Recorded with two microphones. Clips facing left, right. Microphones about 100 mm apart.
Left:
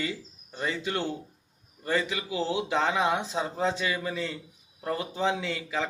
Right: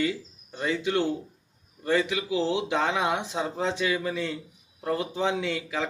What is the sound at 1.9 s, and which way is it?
A man's voice, 15° right (ahead or behind).